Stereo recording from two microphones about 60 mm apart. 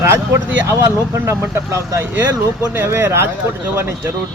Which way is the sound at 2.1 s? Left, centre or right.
Right.